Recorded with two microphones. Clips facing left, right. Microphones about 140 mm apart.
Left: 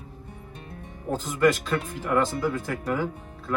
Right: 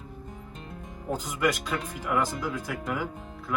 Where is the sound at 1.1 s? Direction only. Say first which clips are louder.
Left 5 dB; 15° right (ahead or behind).